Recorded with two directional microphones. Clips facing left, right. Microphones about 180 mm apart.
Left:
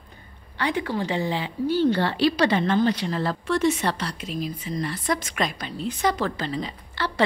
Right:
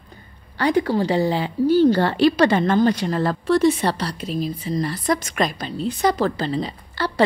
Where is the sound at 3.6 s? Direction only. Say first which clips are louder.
Right 4 dB; 35° right (ahead or behind).